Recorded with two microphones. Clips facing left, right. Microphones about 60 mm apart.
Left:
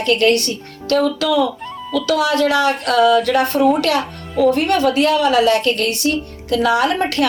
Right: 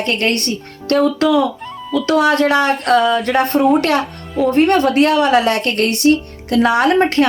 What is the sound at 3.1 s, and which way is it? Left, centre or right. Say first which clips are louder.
A woman's voice: left 1 dB; right.